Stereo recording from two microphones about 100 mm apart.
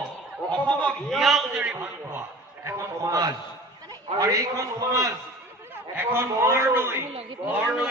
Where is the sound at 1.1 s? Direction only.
Centre (ahead or behind).